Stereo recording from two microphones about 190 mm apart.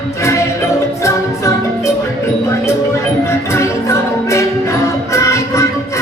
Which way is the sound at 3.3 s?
15° left (ahead or behind).